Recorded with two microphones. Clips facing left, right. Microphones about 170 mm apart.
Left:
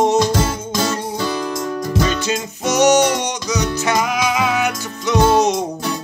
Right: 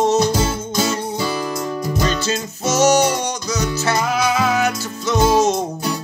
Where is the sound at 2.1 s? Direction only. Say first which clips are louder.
Left 1 dB; 15° left (ahead or behind).